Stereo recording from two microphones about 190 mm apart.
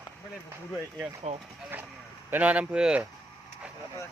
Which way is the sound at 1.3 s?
35° right (ahead or behind).